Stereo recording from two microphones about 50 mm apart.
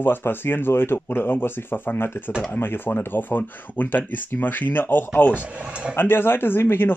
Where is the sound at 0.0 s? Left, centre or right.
Left.